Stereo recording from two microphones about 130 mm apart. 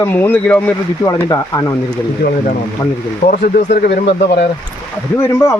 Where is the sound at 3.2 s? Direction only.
55° left (ahead or behind).